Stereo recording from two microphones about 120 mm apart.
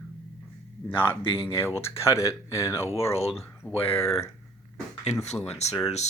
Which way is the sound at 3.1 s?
55° left (ahead or behind).